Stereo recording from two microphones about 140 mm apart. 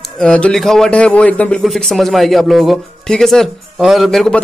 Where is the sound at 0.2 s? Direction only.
5° left (ahead or behind).